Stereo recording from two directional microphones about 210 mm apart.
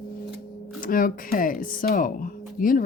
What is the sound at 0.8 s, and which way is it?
Speech, 40° left (ahead or behind).